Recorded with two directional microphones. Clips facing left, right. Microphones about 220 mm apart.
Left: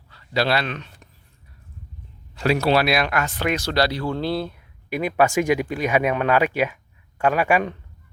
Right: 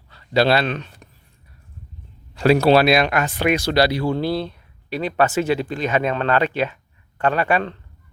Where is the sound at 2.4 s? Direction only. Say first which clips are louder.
Right 5 dB; 35° right (ahead or behind); by 4.5 s centre (ahead or behind).